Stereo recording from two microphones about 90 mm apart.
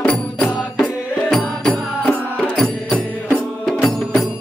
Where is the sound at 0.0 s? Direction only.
15° left (ahead or behind).